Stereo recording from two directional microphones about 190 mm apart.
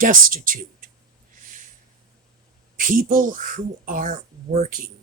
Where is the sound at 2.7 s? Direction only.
50° right (ahead or behind).